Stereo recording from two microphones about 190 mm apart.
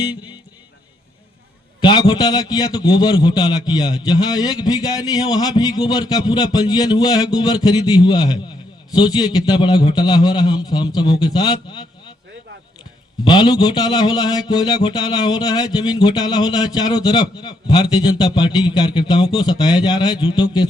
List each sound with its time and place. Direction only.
1.8 s a man's voice: 25° left (ahead or behind)
13.2 s a man's voice: 20° left (ahead or behind)